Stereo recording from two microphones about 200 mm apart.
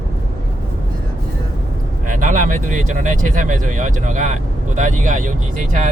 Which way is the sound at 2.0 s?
40° right (ahead or behind).